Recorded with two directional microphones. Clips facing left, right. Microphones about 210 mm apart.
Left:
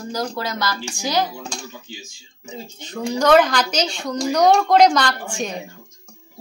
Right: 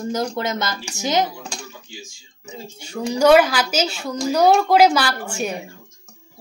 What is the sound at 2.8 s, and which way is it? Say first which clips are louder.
A woman's voice: right 3 dB; 10° right (ahead or behind).